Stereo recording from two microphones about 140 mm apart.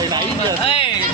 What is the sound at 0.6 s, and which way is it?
Speech, 40° left (ahead or behind).